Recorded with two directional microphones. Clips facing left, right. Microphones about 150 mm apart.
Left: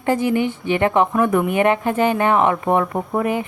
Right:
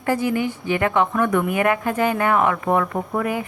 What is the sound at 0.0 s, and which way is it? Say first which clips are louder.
A woman's voice: left 3 dB; 25° left (ahead or behind).